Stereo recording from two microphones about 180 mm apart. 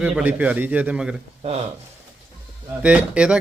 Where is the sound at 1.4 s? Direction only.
35° right (ahead or behind).